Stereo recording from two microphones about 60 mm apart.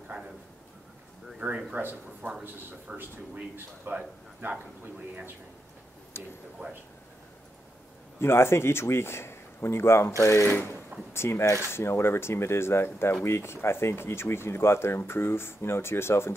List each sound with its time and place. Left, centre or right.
1.7 s speech: right
3.5 s a man's voice: right
6.2 s speech: left
8.2 s speech: left
10.2 s speech: left
10.5 s speech: left